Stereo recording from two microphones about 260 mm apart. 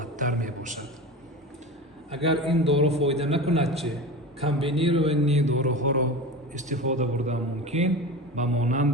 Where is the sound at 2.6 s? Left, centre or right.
Right.